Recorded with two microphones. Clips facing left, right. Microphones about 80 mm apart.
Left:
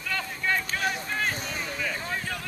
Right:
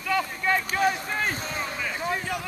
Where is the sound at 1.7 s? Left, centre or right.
Centre.